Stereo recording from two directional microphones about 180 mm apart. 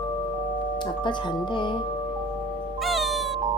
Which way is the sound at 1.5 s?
25° left (ahead or behind).